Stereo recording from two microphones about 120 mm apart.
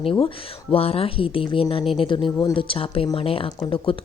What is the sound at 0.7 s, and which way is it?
A woman's voice, 55° left (ahead or behind).